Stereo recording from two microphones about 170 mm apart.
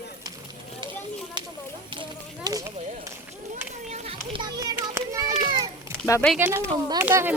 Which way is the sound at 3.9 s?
40° right (ahead or behind).